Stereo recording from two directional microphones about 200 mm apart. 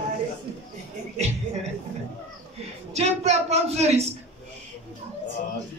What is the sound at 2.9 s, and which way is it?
A woman's voice, 35° right (ahead or behind).